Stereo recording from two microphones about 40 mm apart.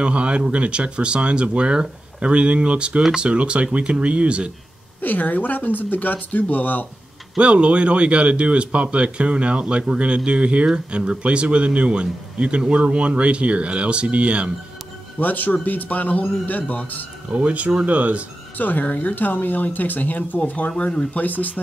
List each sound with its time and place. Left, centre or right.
0.0 s speech: right
5.0 s speech: left
7.3 s speech: right
15.1 s speech: left
17.3 s speech: right
18.6 s speech: left